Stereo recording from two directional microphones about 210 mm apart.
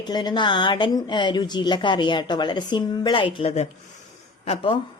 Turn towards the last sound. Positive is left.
turn(degrees=25)  # may be behind; listen again after turning